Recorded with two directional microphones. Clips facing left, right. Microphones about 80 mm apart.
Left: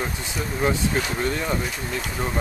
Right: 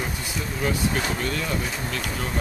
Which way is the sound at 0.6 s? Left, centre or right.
Left.